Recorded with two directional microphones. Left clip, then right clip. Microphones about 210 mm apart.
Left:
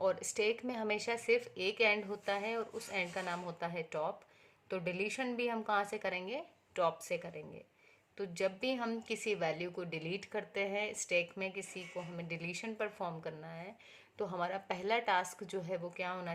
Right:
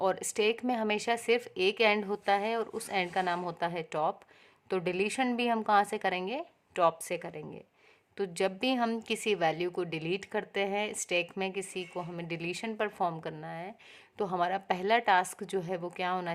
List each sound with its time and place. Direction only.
0.0 s a woman's voice: 40° right (ahead or behind)